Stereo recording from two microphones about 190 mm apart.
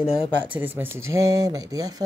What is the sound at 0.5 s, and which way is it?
A woman's voice, 10° right (ahead or behind).